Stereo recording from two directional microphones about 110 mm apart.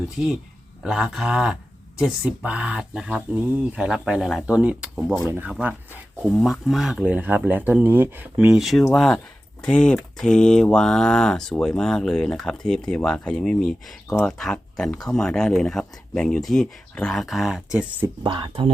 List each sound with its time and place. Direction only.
0.8 s speech: 5° right (ahead or behind)
5.2 s speech: 20° right (ahead or behind)
5.5 s speech: 10° right (ahead or behind)
18.2 s speech: 45° right (ahead or behind)